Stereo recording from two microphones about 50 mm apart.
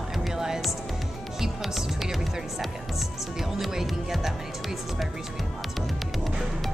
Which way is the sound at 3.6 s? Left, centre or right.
Centre.